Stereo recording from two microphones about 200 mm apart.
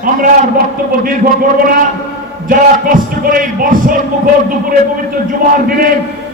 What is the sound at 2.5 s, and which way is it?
A man's voice, 45° right (ahead or behind).